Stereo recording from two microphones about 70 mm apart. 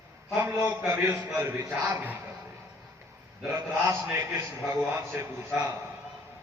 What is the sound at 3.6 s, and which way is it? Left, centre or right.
A man's voice, right.